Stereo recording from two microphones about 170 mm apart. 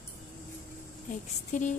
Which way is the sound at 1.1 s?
50° left (ahead or behind).